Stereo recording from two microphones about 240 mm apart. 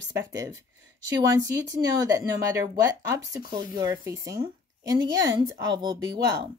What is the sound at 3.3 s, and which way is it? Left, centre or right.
Speech, centre.